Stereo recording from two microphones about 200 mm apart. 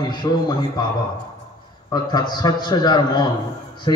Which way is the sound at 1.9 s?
20° left (ahead or behind).